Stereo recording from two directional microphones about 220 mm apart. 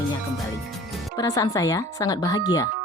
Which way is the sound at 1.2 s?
15° left (ahead or behind).